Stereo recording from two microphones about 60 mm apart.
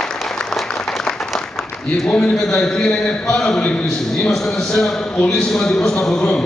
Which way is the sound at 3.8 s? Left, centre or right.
Centre.